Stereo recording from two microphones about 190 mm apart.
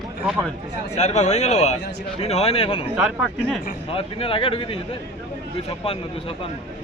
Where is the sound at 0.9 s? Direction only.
35° left (ahead or behind).